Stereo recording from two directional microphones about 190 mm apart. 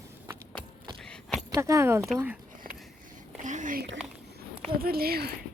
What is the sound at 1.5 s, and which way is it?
Speech, 15° right (ahead or behind).